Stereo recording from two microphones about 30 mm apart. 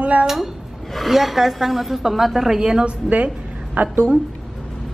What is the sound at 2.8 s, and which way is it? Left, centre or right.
Speech, right.